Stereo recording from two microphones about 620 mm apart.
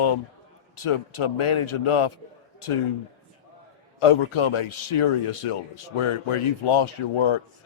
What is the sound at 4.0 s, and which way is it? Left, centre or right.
A man's voice, left.